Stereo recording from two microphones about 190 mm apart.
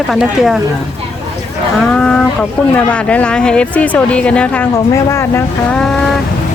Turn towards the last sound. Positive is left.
turn(degrees=10)  # may be behind; listen again after turning